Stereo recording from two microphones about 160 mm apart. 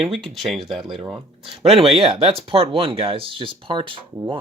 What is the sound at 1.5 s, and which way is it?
Speech, 35° right (ahead or behind).